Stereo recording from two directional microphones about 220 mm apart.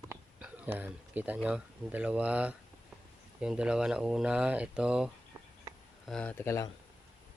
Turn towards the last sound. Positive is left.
turn(degrees=15)  # may be behind; listen again after turning